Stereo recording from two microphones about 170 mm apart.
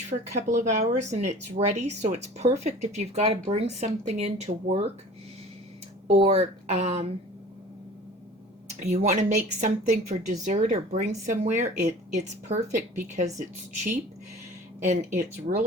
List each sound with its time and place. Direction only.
0.1 s speech: 45° right (ahead or behind)
6.1 s speech: 35° right (ahead or behind)
8.8 s speech: 40° right (ahead or behind)
14.8 s speech: 45° right (ahead or behind)